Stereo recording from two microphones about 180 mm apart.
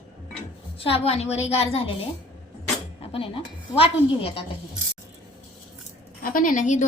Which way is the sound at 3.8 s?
30° left (ahead or behind).